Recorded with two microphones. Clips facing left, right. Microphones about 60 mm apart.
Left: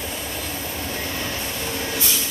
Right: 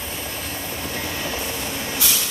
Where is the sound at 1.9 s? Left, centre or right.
Right.